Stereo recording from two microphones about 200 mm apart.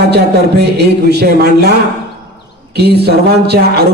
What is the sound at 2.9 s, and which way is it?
Speech, 55° right (ahead or behind).